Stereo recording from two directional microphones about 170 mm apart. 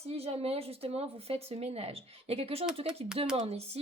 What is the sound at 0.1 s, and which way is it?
Speech, 40° right (ahead or behind).